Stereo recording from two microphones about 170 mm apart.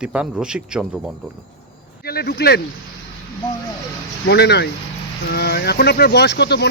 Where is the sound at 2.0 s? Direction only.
65° left (ahead or behind).